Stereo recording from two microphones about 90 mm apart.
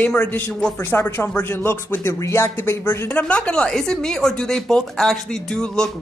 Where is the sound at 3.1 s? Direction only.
15° left (ahead or behind).